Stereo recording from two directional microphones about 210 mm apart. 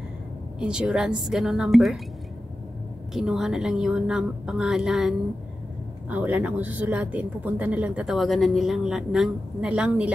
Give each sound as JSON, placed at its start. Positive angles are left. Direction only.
{"t": 0.6, "sound": "a woman's voice", "side_deg": -5}
{"t": 3.1, "sound": "a woman's voice", "side_deg": 0}